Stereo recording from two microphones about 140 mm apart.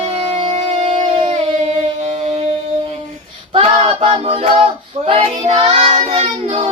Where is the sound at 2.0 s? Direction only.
50° right (ahead or behind).